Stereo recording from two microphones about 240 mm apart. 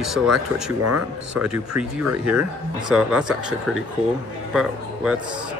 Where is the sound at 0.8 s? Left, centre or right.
Right.